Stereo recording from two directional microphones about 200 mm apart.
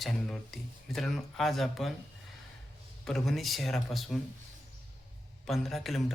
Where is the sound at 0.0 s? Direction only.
Centre (ahead or behind).